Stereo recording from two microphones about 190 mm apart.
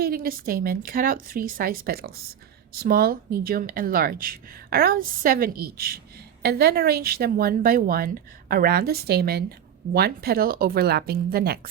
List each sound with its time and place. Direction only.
0.0 s speech: 50° right (ahead or behind)